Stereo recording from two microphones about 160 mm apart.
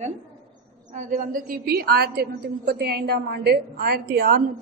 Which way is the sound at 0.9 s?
50° right (ahead or behind).